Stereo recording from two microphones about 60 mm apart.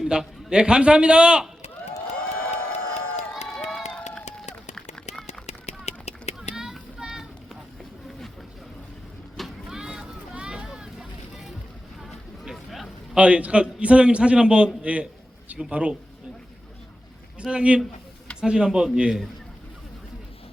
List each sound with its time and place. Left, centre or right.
0.0 s a man's voice: centre
2.4 s crowd: left
3.4 s crowd: centre
4.7 s run: centre
7.0 s a sound: centre
9.4 s a sound: centre
10.3 s vehicle: centre
12.0 s a sound: centre
13.1 s a man's voice: centre
17.3 s a man's voice: centre